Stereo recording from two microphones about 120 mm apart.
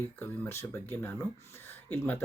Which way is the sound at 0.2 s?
15° left (ahead or behind).